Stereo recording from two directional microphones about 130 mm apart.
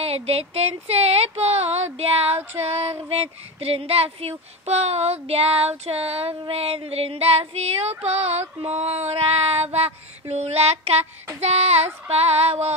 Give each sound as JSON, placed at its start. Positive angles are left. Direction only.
{"t": 0.0, "sound": "speech", "side_deg": -50}
{"t": 8.0, "sound": "female singing", "side_deg": -55}